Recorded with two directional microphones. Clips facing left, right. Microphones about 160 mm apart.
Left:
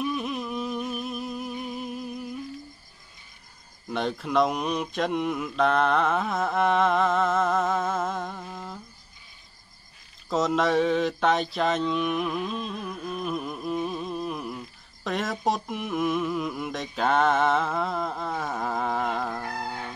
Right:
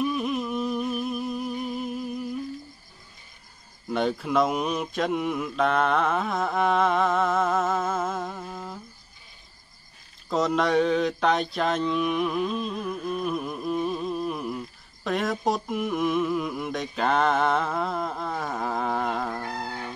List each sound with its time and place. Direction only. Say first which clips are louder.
0.0 s a sound: right 3 dB; centre (ahead or behind)
3.9 s mantra: right 2 dB; centre (ahead or behind)
10.3 s mantra: right 1 dB; centre (ahead or behind)